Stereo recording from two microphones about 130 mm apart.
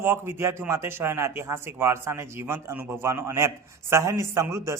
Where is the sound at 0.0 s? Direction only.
20° right (ahead or behind).